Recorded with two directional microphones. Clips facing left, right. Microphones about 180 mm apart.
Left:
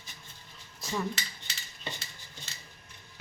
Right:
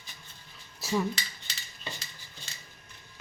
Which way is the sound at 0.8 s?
10° right (ahead or behind).